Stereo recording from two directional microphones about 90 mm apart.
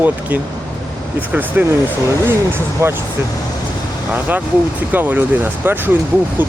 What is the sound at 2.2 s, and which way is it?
Speech, 25° right (ahead or behind).